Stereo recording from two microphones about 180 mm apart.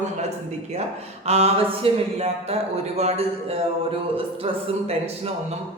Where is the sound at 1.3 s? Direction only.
35° right (ahead or behind).